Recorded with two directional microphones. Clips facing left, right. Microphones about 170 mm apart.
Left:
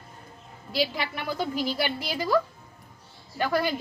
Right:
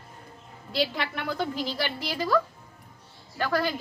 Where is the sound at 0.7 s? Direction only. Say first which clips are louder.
Even; 10° left (ahead or behind).